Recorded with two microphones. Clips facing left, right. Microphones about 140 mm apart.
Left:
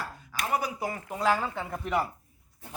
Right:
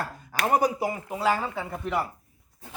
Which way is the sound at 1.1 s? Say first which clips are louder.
Left 1 dB; 5° right (ahead or behind).